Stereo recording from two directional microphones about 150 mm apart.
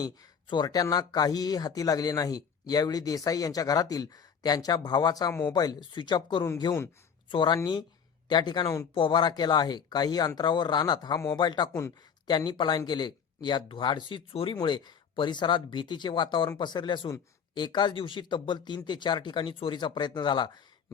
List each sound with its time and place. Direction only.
0.0 s speech: 30° left (ahead or behind)
9.0 s speech: 30° left (ahead or behind)